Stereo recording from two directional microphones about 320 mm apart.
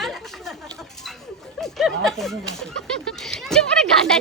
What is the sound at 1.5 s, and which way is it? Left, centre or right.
Speech, centre.